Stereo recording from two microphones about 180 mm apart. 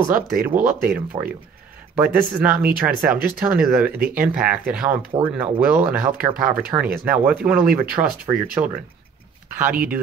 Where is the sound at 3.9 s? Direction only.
55° right (ahead or behind).